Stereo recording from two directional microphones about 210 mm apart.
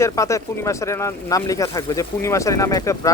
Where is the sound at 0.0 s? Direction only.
15° left (ahead or behind).